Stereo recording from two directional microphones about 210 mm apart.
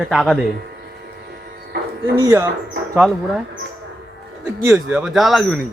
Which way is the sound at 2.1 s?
15° right (ahead or behind).